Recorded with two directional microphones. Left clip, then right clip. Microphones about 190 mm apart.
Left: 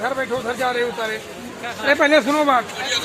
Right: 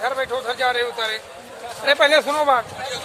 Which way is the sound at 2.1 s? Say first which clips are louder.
Left 1 dB; 50° right (ahead or behind).